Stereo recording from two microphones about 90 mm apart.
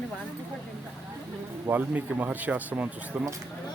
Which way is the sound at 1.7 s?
20° right (ahead or behind).